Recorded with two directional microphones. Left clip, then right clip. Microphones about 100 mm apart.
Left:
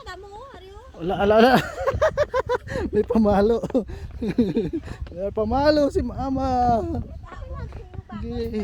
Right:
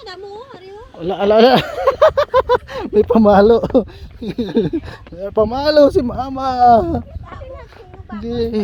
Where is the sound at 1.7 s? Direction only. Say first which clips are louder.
Right 9 dB; 35° left (ahead or behind).